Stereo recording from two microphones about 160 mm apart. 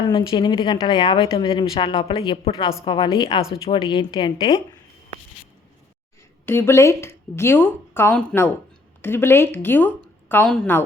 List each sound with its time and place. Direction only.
0.1 s speech: 30° left (ahead or behind)
6.4 s speech: 15° left (ahead or behind)